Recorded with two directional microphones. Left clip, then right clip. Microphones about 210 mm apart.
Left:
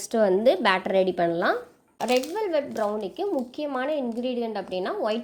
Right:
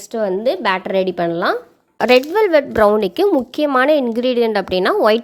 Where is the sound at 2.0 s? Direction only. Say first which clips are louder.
Right 12 dB; 35° right (ahead or behind).